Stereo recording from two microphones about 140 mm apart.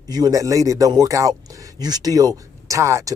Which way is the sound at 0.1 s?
25° right (ahead or behind).